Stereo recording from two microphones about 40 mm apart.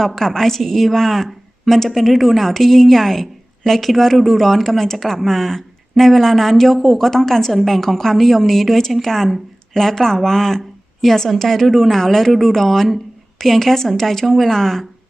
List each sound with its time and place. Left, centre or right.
0.0 s a woman's voice: centre